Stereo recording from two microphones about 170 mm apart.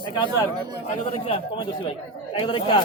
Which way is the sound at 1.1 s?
35° left (ahead or behind).